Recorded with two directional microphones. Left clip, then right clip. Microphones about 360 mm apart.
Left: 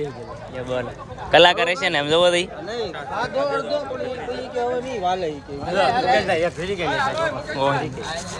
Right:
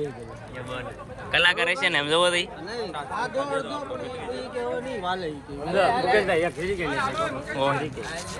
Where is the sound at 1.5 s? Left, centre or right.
Centre.